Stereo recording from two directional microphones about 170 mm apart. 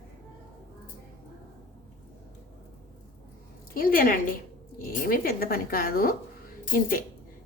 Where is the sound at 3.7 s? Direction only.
55° left (ahead or behind).